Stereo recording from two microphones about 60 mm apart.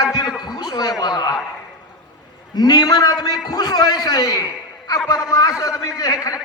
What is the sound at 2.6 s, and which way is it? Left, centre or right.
Speech, left.